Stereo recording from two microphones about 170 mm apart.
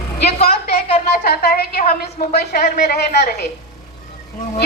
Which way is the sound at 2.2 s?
70° left (ahead or behind).